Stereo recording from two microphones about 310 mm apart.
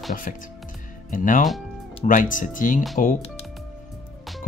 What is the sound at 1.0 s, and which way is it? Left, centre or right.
Speech, left.